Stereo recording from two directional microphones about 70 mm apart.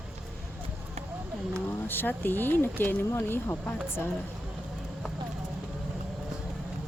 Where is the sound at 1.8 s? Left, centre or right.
Left.